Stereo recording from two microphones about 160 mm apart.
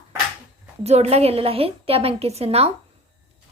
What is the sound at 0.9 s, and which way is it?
Speech, 40° right (ahead or behind).